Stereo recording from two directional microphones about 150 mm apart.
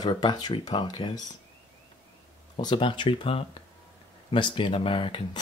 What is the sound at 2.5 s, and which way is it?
Speech, 35° left (ahead or behind).